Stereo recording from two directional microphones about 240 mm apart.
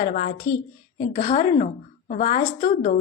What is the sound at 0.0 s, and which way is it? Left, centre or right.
A woman's voice, left.